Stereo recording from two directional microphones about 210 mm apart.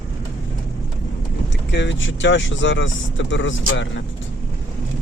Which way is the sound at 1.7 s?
60° left (ahead or behind).